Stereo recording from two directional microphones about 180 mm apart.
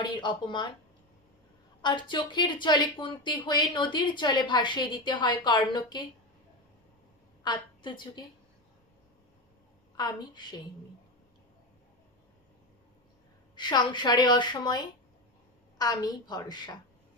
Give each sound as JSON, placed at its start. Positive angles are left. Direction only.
{"t": 0.0, "sound": "speech", "side_deg": 25}
{"t": 1.8, "sound": "speech", "side_deg": 25}
{"t": 7.4, "sound": "a woman's voice", "side_deg": 25}
{"t": 10.0, "sound": "speech", "side_deg": 25}
{"t": 13.6, "sound": "speech", "side_deg": 25}